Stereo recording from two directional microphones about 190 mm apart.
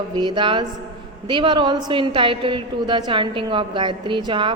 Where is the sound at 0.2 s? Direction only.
25° right (ahead or behind).